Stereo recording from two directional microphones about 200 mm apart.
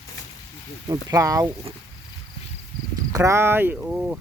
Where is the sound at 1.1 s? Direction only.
15° right (ahead or behind).